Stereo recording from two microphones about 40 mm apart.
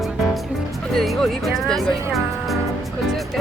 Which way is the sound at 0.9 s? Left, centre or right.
Centre.